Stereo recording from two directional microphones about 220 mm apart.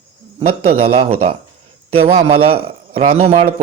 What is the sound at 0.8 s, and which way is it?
A man's voice, 25° right (ahead or behind).